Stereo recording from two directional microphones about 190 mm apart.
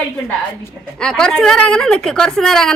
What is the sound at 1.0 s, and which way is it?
A woman's voice, 5° left (ahead or behind).